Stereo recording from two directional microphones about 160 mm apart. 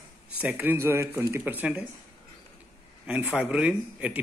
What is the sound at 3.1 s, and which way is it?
Speech, 10° right (ahead or behind).